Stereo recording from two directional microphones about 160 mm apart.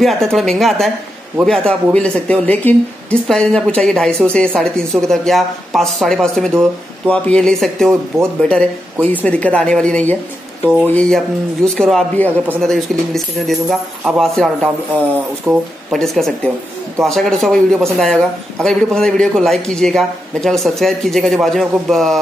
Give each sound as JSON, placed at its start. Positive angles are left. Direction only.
{"t": 0.0, "sound": "speech", "side_deg": 0}
{"t": 15.5, "sound": "speech", "side_deg": -20}
{"t": 15.9, "sound": "speech", "side_deg": 0}